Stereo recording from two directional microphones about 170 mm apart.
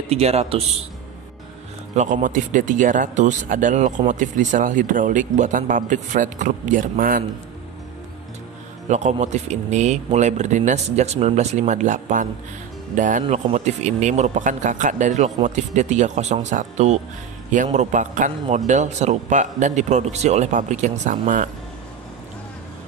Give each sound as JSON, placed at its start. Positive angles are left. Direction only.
{"t": 0.1, "sound": "a man's voice", "side_deg": -40}
{"t": 2.0, "sound": "speech", "side_deg": -50}
{"t": 8.8, "sound": "speech", "side_deg": -40}